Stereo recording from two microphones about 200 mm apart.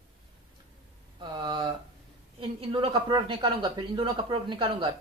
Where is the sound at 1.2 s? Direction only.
25° right (ahead or behind).